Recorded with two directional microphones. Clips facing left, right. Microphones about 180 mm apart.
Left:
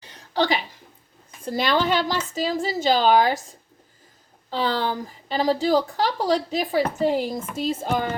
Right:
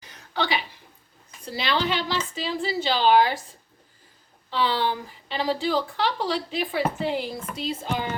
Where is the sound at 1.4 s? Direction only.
50° left (ahead or behind).